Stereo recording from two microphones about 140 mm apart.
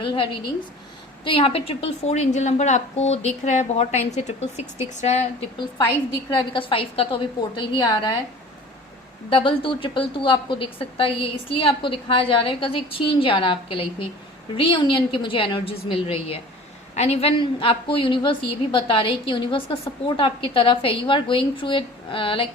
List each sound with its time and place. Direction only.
0.0 s a sound: 35° left (ahead or behind)
1.2 s a woman's voice: 40° left (ahead or behind)
6.3 s a woman's voice: 35° left (ahead or behind)
7.5 s a woman's voice: 30° left (ahead or behind)
9.3 s a woman's voice: 35° left (ahead or behind)